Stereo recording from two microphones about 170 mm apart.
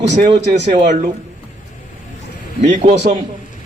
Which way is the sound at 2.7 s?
40° right (ahead or behind).